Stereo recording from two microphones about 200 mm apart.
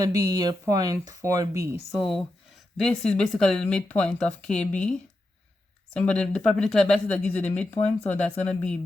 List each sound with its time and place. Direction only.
0.2 s speech: 15° right (ahead or behind)
2.7 s speech: 5° left (ahead or behind)